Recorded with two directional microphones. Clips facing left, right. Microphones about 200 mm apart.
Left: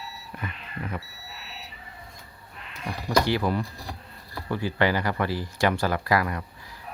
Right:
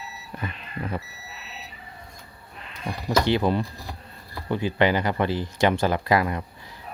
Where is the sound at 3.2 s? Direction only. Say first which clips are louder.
Right 3 dB; 25° right (ahead or behind).